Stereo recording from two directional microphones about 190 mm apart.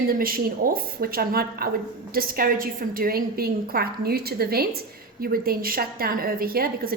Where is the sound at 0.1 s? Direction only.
50° right (ahead or behind).